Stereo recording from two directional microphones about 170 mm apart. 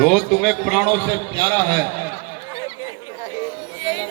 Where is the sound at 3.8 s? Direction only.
30° right (ahead or behind).